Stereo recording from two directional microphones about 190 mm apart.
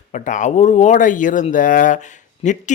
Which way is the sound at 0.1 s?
40° left (ahead or behind).